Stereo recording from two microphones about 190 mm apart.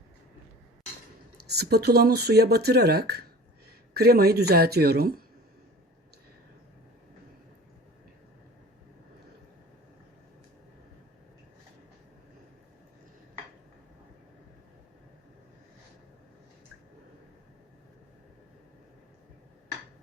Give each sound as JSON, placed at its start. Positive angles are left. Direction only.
{"t": 1.5, "sound": "speech", "side_deg": -60}